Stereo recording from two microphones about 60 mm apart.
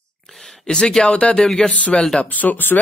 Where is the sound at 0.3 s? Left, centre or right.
Centre.